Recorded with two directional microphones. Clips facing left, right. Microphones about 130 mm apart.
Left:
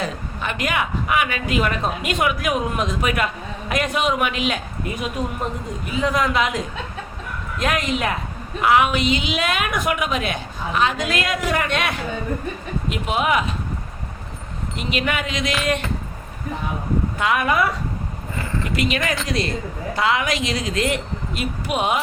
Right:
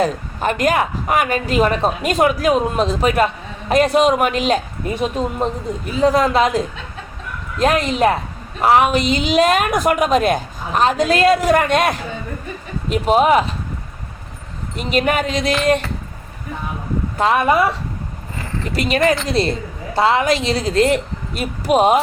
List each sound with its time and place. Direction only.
0.0 s speech: 40° right (ahead or behind)
7.6 s speech: 35° right (ahead or behind)
14.8 s speech: 40° right (ahead or behind)
17.2 s speech: 35° right (ahead or behind)